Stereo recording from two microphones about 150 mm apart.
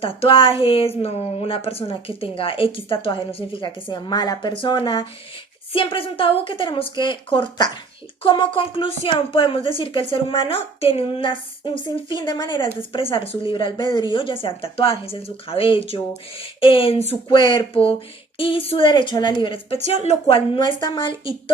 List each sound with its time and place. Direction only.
0.0 s speech: 40° left (ahead or behind)
17.2 s speech: 30° left (ahead or behind)